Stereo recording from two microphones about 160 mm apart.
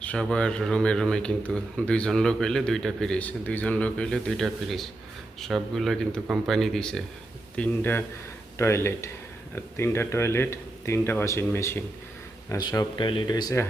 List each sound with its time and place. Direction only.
0.0 s speech: 5° left (ahead or behind); by 13.7 s 20° left (ahead or behind)